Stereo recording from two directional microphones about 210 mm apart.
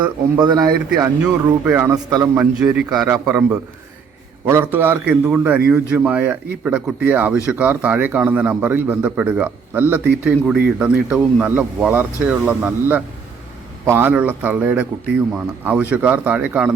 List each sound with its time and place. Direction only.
0.3 s speech: 20° right (ahead or behind)